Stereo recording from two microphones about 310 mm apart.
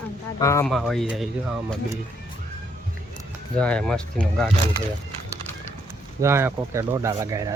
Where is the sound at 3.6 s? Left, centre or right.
Centre.